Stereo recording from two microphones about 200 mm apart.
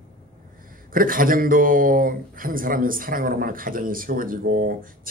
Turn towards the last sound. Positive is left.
turn(degrees=-45)  # may be behind; listen again after turning